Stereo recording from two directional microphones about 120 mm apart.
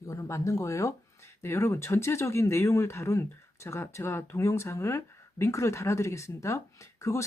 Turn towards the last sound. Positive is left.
turn(degrees=25)  # may be behind; listen again after turning